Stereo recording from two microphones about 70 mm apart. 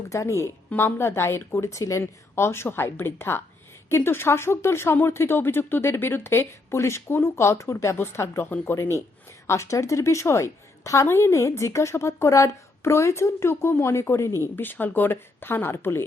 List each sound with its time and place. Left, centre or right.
0.1 s a woman's voice: left
8.4 s speech: left
8.7 s a woman's voice: left
14.4 s speech: left